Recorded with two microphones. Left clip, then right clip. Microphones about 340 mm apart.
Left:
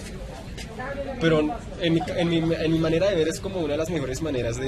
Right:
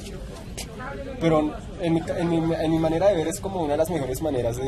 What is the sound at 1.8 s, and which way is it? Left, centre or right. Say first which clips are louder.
Speech: left 1 dB; right.